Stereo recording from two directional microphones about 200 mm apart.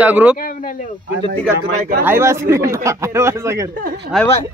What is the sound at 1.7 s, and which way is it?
Speech, 45° right (ahead or behind).